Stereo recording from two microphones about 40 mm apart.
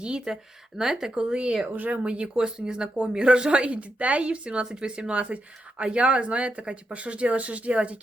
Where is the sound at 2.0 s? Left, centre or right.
Right.